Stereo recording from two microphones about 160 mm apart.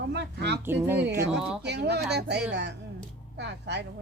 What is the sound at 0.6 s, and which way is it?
Speech, 15° right (ahead or behind).